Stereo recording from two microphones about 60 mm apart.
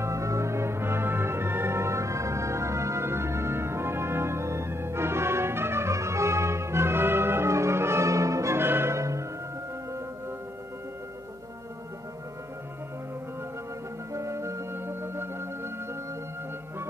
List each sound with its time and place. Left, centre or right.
0.0 s music: right
8.5 s music: right
14.1 s music: right